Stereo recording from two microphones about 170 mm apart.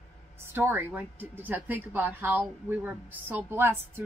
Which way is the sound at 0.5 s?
10° right (ahead or behind).